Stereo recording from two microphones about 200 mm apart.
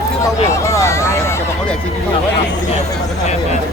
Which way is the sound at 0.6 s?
15° left (ahead or behind).